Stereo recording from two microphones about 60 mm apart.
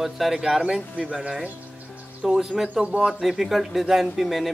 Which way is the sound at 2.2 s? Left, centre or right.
Centre.